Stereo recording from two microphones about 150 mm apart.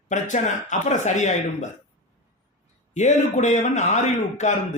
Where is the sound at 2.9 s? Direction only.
50° left (ahead or behind).